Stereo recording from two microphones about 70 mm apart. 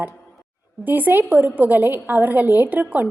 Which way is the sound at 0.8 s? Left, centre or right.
Right.